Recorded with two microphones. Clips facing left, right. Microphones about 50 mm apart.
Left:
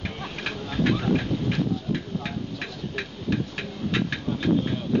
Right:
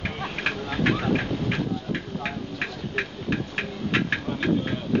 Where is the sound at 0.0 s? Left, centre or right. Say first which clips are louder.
Right 4 dB; right.